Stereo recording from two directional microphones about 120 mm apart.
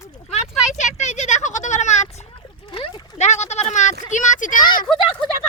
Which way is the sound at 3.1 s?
75° left (ahead or behind).